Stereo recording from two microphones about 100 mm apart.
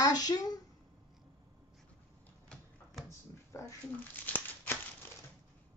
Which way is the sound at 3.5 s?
30° left (ahead or behind).